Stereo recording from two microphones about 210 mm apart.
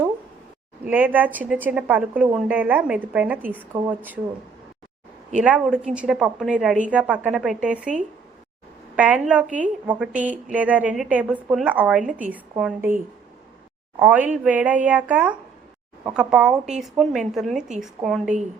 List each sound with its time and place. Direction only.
0.9 s speech: 10° right (ahead or behind)
5.4 s speech: 5° right (ahead or behind)
9.0 s speech: 5° right (ahead or behind)
14.0 s speech: 5° right (ahead or behind)